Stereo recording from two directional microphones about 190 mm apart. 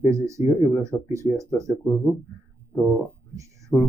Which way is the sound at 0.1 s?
15° right (ahead or behind).